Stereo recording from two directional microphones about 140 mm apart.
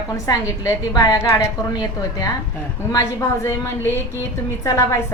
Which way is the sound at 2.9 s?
25° left (ahead or behind).